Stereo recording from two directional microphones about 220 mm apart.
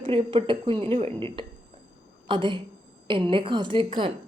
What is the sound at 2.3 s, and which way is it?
Speech, 20° right (ahead or behind).